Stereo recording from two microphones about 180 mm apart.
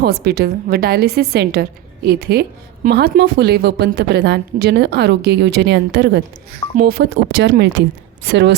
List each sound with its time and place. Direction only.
0.0 s a woman's voice: 65° right (ahead or behind)
6.7 s a woman's voice: 60° right (ahead or behind); by 8.5 s 75° right (ahead or behind)